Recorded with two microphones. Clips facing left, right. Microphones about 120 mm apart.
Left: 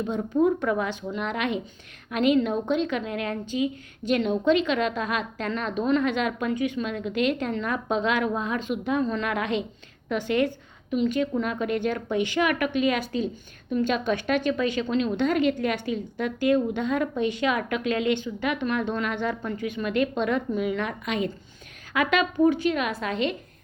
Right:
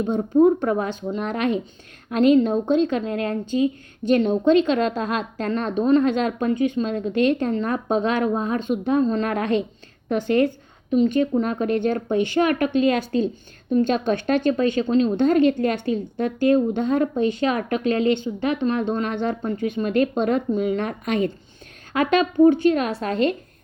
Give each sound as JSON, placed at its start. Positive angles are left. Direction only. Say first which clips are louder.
{"t": 0.2, "sound": "a woman's voice", "louder": "right 6 dB", "side_deg": -35}